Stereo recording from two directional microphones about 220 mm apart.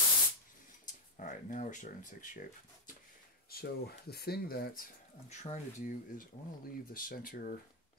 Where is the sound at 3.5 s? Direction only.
45° left (ahead or behind).